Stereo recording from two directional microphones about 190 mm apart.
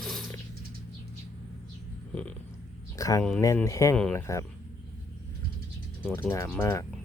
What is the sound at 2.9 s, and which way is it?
Speech, 15° left (ahead or behind).